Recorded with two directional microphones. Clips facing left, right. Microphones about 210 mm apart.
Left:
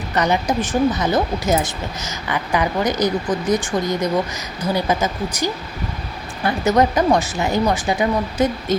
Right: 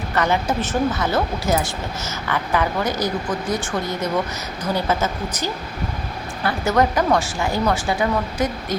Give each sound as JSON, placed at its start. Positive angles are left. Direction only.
{"t": 0.1, "sound": "speech", "side_deg": 20}